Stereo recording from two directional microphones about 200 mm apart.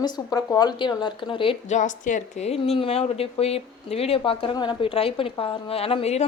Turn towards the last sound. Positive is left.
turn(degrees=30)  # may be behind; listen again after turning